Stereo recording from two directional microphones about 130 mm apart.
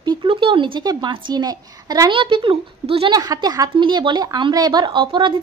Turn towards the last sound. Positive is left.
turn(degrees=-40)  # may be behind; listen again after turning